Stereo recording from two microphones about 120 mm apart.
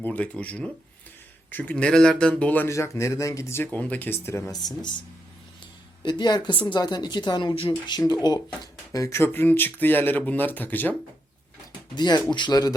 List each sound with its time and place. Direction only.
0.0 s speech: 15° left (ahead or behind)
2.7 s speech: 25° left (ahead or behind)
4.6 s speech: 35° left (ahead or behind)
6.1 s speech: 40° left (ahead or behind)
7.5 s speech: 50° left (ahead or behind)
7.9 s speech: 35° left (ahead or behind); by 10.9 s 15° left (ahead or behind)
11.9 s speech: 35° left (ahead or behind)